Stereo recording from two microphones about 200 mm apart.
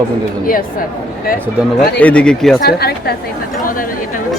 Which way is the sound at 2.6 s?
50° left (ahead or behind).